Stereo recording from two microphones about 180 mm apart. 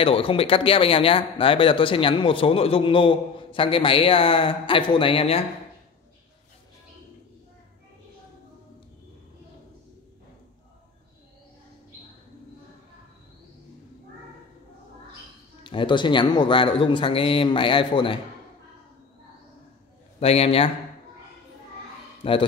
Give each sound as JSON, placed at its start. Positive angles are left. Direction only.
{"t": 0.0, "sound": "speech", "side_deg": 30}
{"t": 15.6, "sound": "speech", "side_deg": 25}
{"t": 20.2, "sound": "a man's voice", "side_deg": 35}
{"t": 22.2, "sound": "a man's voice", "side_deg": 30}